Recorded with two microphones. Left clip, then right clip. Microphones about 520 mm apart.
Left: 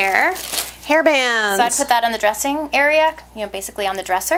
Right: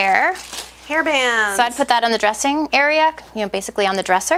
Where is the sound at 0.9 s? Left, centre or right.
Left.